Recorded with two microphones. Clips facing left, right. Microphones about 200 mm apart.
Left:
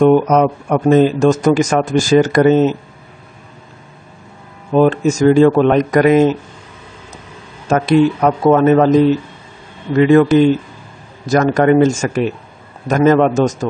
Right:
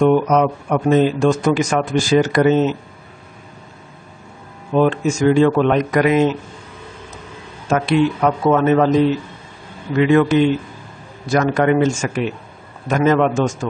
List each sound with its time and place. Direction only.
0.1 s speech: 45° left (ahead or behind)
4.7 s a man's voice: 40° left (ahead or behind)
7.7 s a man's voice: 40° left (ahead or behind)
9.9 s a man's voice: 40° left (ahead or behind)